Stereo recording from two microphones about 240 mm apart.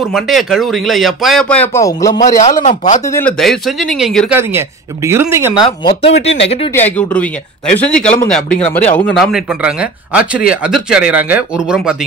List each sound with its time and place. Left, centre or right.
0.1 s speech: centre
2.1 s a man's voice: left
3.1 s speech: centre
5.5 s speech: centre
6.7 s speech: centre
8.5 s speech: left
8.8 s speech: centre